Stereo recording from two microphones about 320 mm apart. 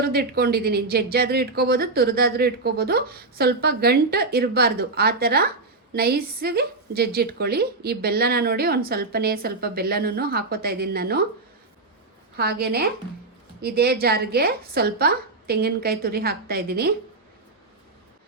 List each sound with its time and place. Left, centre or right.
0.0 s speech: right
12.4 s speech: right